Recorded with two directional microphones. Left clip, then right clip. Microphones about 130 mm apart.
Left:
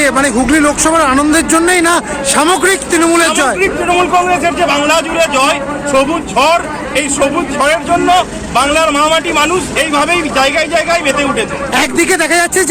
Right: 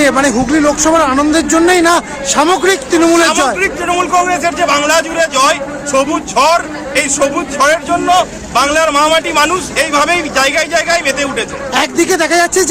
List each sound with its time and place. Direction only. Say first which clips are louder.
0.0 s a man's voice: even; 20° right (ahead or behind)